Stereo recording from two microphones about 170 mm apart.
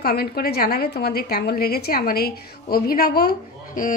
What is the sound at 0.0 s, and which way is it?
A woman's voice, 65° left (ahead or behind).